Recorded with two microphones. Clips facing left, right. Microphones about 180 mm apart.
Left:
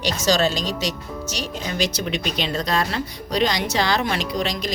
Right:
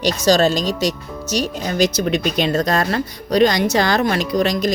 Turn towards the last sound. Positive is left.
turn(degrees=-45)  # may be behind; listen again after turning